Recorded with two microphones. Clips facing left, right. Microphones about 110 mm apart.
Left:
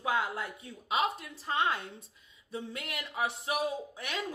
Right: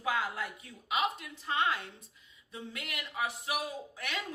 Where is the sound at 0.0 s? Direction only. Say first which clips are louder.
Left 2 dB; 25° left (ahead or behind).